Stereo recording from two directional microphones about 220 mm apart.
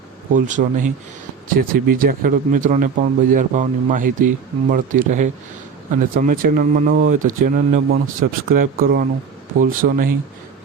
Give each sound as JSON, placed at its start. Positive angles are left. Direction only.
{"t": 0.3, "sound": "speech", "side_deg": -35}